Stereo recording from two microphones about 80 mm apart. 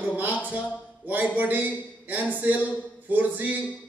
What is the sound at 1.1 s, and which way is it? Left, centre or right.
Speech, right.